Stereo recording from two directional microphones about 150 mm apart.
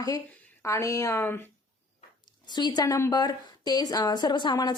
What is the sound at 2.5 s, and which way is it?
A woman's voice, 30° left (ahead or behind).